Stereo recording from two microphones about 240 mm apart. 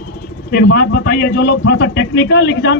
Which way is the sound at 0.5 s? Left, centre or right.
Left.